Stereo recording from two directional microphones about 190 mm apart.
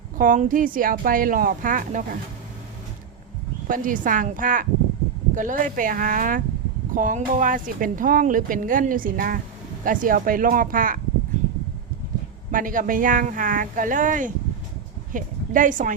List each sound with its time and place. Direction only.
0.2 s a woman's voice: 45° right (ahead or behind)
3.7 s a woman's voice: 45° right (ahead or behind)
12.5 s a woman's voice: 45° right (ahead or behind)